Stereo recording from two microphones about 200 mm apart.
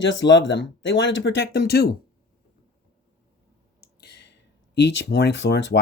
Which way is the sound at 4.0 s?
55° left (ahead or behind).